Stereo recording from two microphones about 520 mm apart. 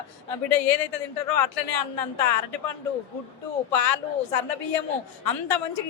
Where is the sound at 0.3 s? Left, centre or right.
Left.